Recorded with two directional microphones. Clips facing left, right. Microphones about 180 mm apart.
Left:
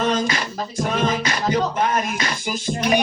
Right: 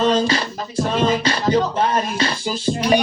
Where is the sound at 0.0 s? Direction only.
30° right (ahead or behind).